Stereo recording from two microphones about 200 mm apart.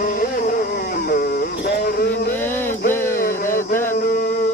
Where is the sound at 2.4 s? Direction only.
10° left (ahead or behind).